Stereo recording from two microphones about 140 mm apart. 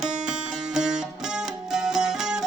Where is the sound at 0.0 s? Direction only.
5° right (ahead or behind).